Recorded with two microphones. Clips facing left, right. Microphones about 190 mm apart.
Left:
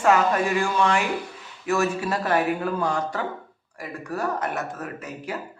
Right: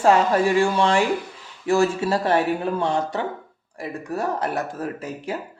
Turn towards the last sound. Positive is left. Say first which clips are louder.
# right 4 dB
turn(degrees=-30)  # may be behind; listen again after turning